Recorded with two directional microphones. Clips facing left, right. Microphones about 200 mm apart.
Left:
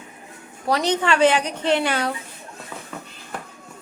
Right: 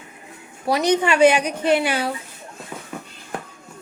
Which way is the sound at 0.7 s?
10° right (ahead or behind).